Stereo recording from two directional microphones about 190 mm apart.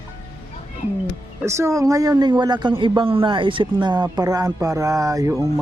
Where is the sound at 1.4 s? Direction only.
15° right (ahead or behind).